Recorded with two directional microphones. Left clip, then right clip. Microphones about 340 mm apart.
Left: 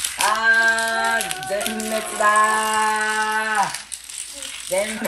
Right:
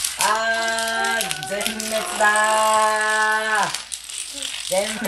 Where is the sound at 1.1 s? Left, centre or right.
Centre.